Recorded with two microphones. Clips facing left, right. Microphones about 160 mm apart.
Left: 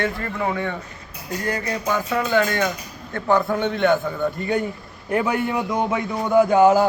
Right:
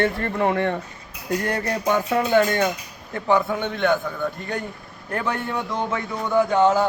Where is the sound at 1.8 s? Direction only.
20° right (ahead or behind).